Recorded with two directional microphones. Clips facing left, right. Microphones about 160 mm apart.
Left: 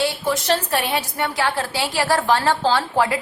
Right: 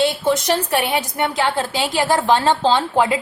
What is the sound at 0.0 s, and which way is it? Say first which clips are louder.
A woman's voice: right 4 dB; 20° right (ahead or behind).